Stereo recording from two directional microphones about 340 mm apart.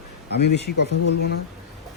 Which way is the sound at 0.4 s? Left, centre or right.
Left.